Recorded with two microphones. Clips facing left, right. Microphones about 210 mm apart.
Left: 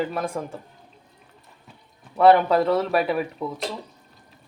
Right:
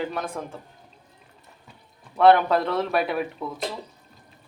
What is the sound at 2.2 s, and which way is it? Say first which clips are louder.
Speech: left 1 dB; 5° left (ahead or behind).